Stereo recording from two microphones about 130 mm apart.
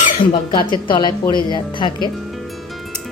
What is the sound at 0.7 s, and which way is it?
Speech, 35° left (ahead or behind).